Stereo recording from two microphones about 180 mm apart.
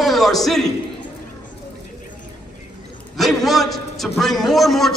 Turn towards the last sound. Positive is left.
turn(degrees=0)  # may be behind; listen again after turning